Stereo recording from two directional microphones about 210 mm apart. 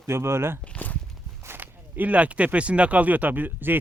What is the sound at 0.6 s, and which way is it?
Walk, 5° left (ahead or behind).